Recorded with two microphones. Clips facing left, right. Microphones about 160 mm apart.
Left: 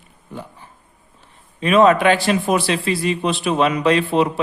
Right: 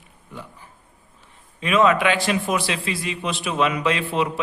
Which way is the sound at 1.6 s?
40° left (ahead or behind).